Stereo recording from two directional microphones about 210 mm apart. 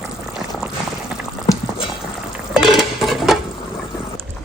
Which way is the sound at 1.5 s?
15° left (ahead or behind).